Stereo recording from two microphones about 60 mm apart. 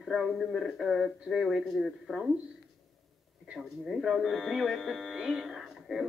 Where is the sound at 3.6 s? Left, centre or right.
Centre.